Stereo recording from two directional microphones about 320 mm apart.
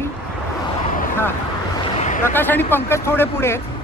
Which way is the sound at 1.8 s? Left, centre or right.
Centre.